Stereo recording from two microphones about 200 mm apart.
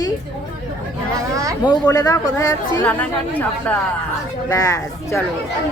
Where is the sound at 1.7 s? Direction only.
20° left (ahead or behind).